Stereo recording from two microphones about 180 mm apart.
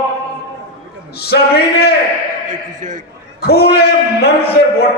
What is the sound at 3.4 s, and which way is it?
A man's voice, 60° left (ahead or behind).